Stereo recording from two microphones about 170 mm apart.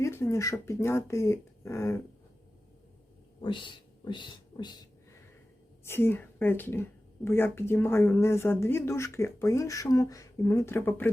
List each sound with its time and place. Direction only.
0.0 s speech: 15° left (ahead or behind)
3.4 s speech: 25° left (ahead or behind)
5.8 s speech: 15° left (ahead or behind)